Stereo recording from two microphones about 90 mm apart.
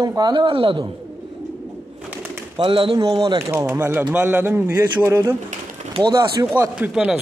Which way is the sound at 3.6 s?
20° right (ahead or behind).